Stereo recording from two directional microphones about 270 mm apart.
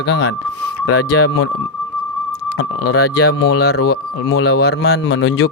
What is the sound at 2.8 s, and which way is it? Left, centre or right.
Speech, left.